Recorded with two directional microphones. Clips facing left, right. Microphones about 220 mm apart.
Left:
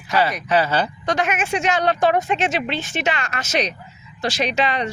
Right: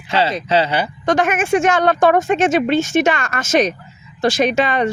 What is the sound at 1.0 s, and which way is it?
Speech, 50° right (ahead or behind).